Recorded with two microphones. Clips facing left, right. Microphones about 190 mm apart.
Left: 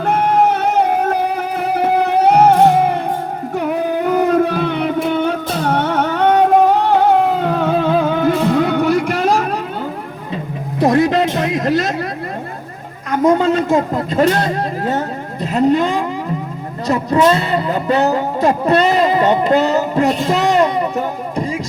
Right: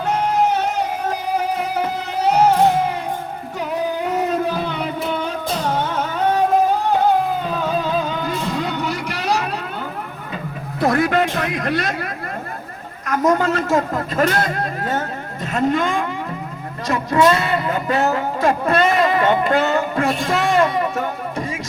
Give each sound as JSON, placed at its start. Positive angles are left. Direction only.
{"t": 0.0, "sound": "music", "side_deg": 60}
{"t": 3.5, "sound": "a sound", "side_deg": 60}
{"t": 10.8, "sound": "music", "side_deg": 20}
{"t": 11.3, "sound": "a sound", "side_deg": 25}
{"t": 13.1, "sound": "a man's voice", "side_deg": 25}
{"t": 16.8, "sound": "music", "side_deg": 35}
{"t": 18.3, "sound": "a man's voice", "side_deg": 20}
{"t": 18.9, "sound": "a sound", "side_deg": 25}
{"t": 19.2, "sound": "music", "side_deg": 30}
{"t": 20.1, "sound": "a man's voice", "side_deg": 20}
{"t": 20.7, "sound": "speech", "side_deg": 30}